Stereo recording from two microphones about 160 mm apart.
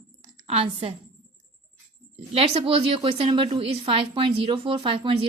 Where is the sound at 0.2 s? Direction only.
35° right (ahead or behind).